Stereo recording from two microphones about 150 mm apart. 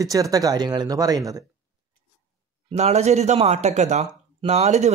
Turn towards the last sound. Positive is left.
turn(degrees=-50)  # may be behind; listen again after turning